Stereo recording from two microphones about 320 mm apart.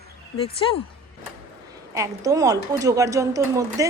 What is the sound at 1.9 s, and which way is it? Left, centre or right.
A woman's voice, centre.